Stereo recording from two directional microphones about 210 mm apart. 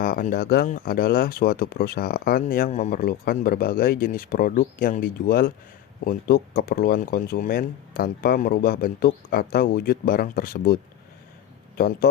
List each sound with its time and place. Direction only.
0.0 s speech: 45° left (ahead or behind)
11.8 s speech: 45° left (ahead or behind)